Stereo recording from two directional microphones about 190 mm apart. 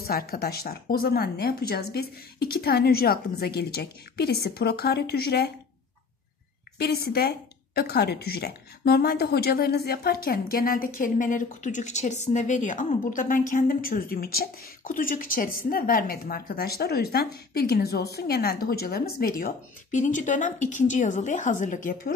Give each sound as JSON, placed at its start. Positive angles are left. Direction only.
{"t": 0.0, "sound": "speech", "side_deg": 50}
{"t": 6.8, "sound": "a woman's voice", "side_deg": 55}